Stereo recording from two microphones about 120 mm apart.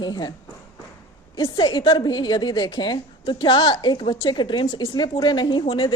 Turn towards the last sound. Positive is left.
turn(degrees=45)  # may be behind; listen again after turning